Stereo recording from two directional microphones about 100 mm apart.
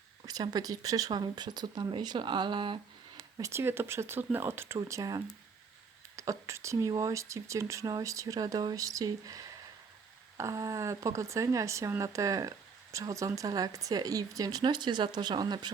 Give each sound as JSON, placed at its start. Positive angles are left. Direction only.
{"t": 0.3, "sound": "speech", "side_deg": -40}
{"t": 3.5, "sound": "speech", "side_deg": -25}